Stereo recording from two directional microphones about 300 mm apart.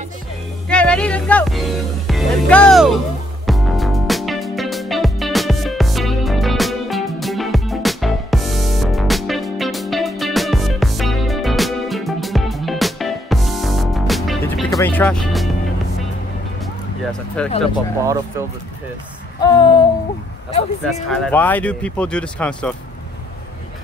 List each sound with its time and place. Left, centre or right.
0.7 s speech: centre
3.4 s music: centre
17.4 s speech: centre
19.4 s a sound: centre
20.8 s speech: centre